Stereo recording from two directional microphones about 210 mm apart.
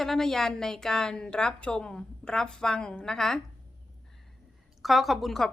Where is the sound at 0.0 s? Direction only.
Centre (ahead or behind).